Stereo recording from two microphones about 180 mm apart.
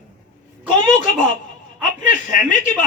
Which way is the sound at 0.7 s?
45° left (ahead or behind).